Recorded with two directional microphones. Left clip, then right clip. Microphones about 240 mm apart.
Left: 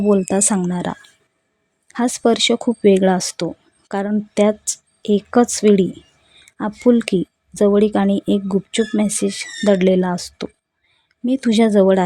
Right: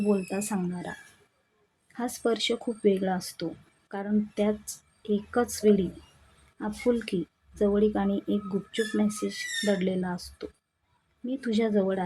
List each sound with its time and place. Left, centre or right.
0.1 s speech: left